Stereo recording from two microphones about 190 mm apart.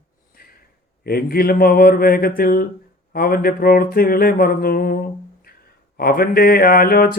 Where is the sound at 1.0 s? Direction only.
55° left (ahead or behind).